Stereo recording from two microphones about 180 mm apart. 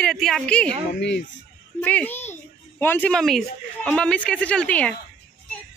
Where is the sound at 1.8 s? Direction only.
10° left (ahead or behind).